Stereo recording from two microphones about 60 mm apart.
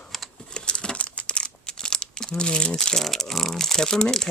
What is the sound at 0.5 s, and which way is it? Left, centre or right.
Crumpling, centre.